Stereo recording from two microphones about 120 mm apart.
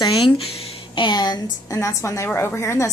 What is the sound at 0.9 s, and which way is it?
Speech, 40° left (ahead or behind).